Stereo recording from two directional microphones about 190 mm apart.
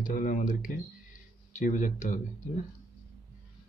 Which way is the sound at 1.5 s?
40° left (ahead or behind).